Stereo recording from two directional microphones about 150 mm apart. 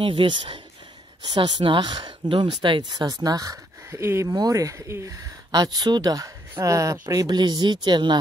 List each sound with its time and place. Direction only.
0.0 s speech: 35° right (ahead or behind)